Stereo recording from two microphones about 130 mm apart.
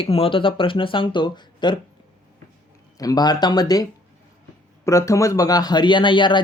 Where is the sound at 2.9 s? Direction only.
30° left (ahead or behind).